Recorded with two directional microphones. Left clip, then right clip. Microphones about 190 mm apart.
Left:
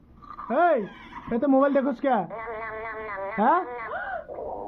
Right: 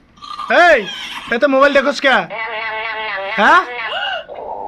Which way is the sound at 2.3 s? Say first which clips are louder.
Right 12 dB; 25° right (ahead or behind).